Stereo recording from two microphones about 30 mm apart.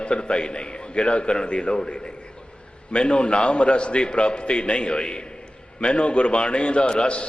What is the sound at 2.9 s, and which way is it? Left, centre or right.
A man's voice, left.